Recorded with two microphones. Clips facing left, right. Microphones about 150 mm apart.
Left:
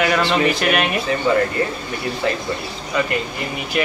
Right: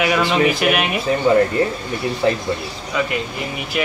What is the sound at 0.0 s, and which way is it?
Speech, 5° right (ahead or behind).